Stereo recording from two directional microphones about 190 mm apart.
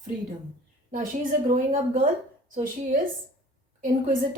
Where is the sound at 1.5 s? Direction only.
45° right (ahead or behind).